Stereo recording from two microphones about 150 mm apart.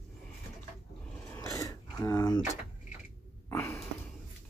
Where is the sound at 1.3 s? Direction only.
20° left (ahead or behind).